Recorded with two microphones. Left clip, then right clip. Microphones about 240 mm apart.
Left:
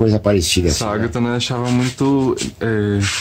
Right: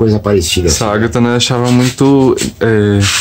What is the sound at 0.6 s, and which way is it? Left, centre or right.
Speech, centre.